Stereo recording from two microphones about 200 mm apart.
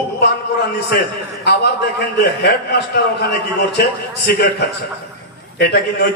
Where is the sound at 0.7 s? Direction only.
55° left (ahead or behind).